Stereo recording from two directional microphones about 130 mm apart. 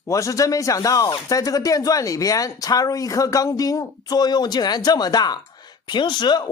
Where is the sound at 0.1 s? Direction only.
25° left (ahead or behind).